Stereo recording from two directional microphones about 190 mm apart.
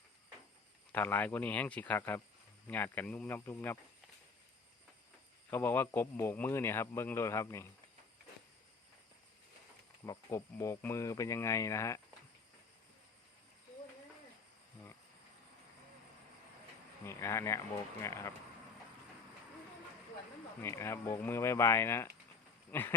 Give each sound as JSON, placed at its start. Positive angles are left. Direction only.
{"t": 0.9, "sound": "speech", "side_deg": 10}
{"t": 5.5, "sound": "speech", "side_deg": 10}
{"t": 10.1, "sound": "speech", "side_deg": 15}
{"t": 17.1, "sound": "speech", "side_deg": 15}
{"t": 20.6, "sound": "speech", "side_deg": 15}